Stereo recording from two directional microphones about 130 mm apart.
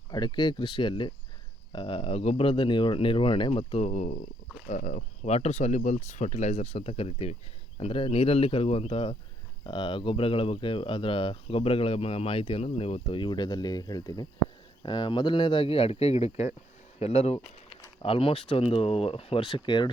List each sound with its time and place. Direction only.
0.1 s speech: 35° left (ahead or behind)